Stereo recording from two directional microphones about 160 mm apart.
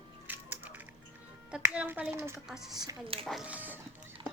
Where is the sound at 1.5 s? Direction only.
5° right (ahead or behind); by 3.0 s 25° right (ahead or behind).